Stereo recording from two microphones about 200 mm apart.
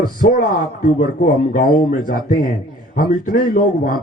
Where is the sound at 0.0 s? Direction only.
45° left (ahead or behind).